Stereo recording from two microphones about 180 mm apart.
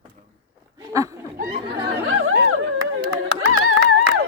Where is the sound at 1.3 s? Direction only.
55° right (ahead or behind).